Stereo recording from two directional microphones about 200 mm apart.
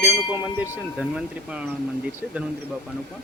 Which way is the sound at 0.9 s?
5° right (ahead or behind).